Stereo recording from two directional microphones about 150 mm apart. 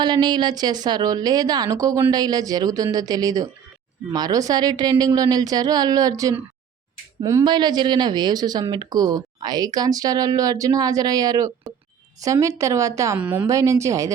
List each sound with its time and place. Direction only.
0.0 s speech: 30° right (ahead or behind)
7.4 s speech: 30° right (ahead or behind)
13.1 s a woman's voice: 10° right (ahead or behind)
13.5 s speech: 20° right (ahead or behind)